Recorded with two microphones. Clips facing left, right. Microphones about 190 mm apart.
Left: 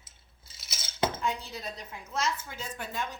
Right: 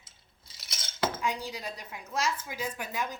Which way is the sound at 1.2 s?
10° right (ahead or behind).